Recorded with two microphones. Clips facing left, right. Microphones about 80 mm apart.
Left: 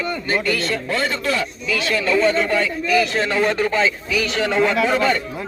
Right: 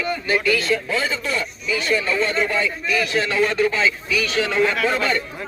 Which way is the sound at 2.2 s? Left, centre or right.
Left.